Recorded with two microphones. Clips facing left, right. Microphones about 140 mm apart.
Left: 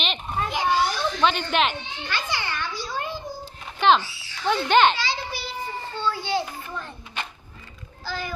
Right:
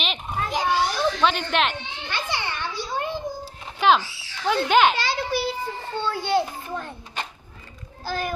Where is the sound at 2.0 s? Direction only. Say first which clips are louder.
Even; 25° right (ahead or behind).